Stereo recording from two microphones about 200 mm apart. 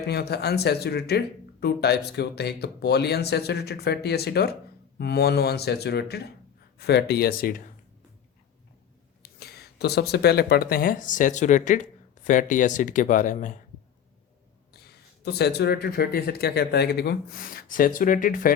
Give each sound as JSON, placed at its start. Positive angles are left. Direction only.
{"t": 0.1, "sound": "speech", "side_deg": 55}
{"t": 9.4, "sound": "speech", "side_deg": 55}
{"t": 15.2, "sound": "speech", "side_deg": 55}